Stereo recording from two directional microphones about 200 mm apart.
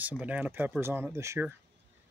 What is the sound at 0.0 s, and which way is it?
Speech, 5° right (ahead or behind).